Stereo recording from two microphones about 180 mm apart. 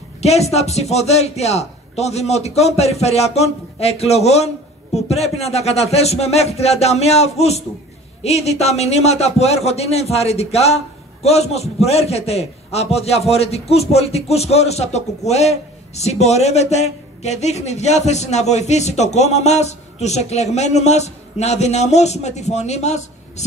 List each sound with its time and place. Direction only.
0.2 s a man's voice: 35° left (ahead or behind)